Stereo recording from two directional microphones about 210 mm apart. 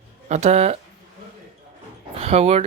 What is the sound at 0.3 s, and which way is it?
Speech, 30° right (ahead or behind).